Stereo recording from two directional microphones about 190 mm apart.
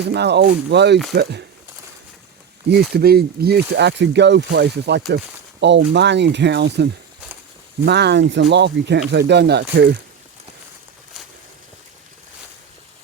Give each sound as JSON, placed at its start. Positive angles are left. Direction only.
{"t": 0.0, "sound": "speech", "side_deg": -60}
{"t": 2.6, "sound": "speech", "side_deg": -55}